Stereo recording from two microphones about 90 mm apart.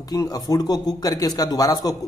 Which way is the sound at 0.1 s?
40° left (ahead or behind).